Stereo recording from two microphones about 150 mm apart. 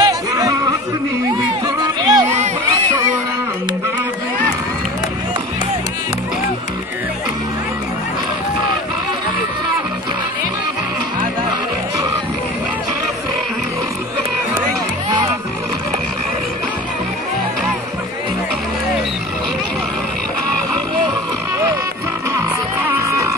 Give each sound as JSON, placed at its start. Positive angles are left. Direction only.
{"t": 0.0, "sound": "a sound", "side_deg": -20}
{"t": 1.8, "sound": "music", "side_deg": -25}
{"t": 22.8, "sound": "music", "side_deg": -15}